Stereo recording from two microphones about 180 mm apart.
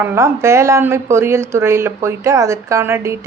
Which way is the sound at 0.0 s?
15° right (ahead or behind).